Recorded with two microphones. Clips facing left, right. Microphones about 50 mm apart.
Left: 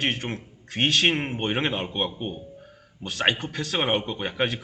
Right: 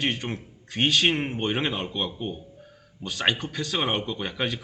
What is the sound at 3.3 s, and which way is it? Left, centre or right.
Speech, left.